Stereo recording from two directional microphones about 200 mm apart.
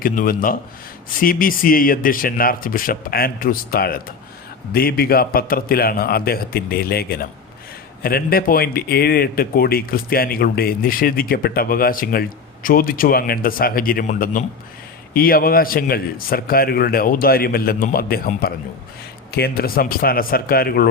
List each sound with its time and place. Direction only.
0.0 s speech: 45° left (ahead or behind)